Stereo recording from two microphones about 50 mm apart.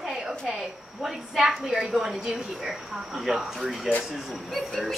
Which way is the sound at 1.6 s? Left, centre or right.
Centre.